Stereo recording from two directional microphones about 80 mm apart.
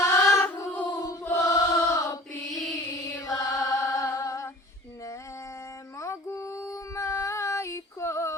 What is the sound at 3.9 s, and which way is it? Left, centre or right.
Music, left.